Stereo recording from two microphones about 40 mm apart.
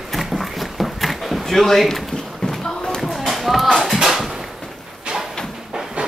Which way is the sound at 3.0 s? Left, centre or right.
Centre.